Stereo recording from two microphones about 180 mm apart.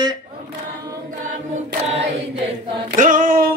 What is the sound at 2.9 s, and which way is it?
Female singing, 50° right (ahead or behind).